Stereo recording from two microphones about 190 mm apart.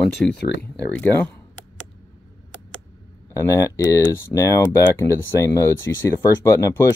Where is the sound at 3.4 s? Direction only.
15° left (ahead or behind).